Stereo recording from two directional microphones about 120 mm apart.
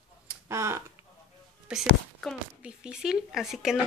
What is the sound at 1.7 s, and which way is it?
A woman's voice, 5° right (ahead or behind).